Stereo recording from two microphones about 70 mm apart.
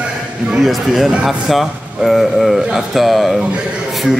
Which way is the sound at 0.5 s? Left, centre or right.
Centre.